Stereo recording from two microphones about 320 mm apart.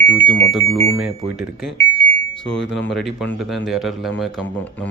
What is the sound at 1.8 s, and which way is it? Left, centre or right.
Alarm, left.